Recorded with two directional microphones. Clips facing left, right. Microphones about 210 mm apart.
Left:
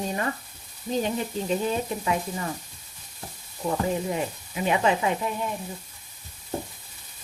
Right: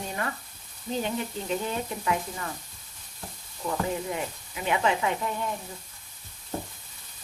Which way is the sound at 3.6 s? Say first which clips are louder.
Left 3 dB; 25° left (ahead or behind).